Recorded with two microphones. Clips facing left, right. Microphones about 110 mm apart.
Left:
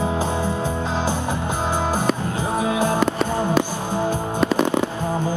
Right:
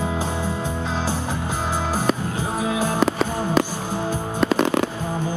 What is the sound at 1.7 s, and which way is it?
Music, 5° right (ahead or behind).